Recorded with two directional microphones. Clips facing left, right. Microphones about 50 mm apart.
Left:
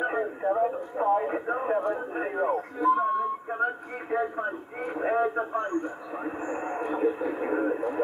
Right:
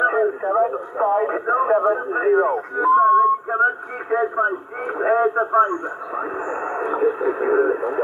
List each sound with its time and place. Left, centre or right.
0.0 s radio: right
0.9 s a man's voice: right
3.5 s a sound: right
4.2 s a man's voice: right
6.1 s speech: right